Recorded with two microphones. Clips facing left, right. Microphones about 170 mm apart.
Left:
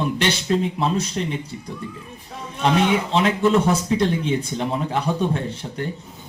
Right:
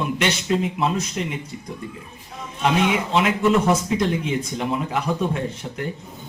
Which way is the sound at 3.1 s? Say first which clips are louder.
Right 1 dB; 30° left (ahead or behind).